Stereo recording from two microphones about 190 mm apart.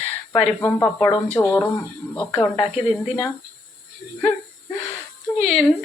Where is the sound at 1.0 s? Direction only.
15° left (ahead or behind).